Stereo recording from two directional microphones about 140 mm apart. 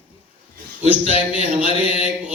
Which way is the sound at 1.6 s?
45° left (ahead or behind).